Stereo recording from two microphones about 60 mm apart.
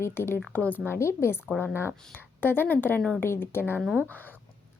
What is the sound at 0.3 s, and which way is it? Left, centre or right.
Speech, left.